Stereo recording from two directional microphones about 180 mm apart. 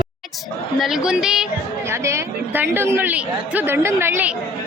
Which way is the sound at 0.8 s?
5° right (ahead or behind).